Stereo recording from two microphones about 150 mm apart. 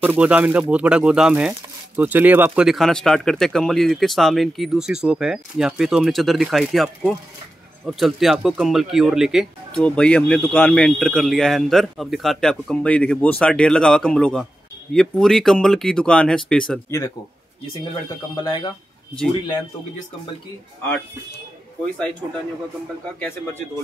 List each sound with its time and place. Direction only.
0.0 s speech: 10° right (ahead or behind)
18.3 s speech: 25° left (ahead or behind)
21.9 s speech: 5° left (ahead or behind)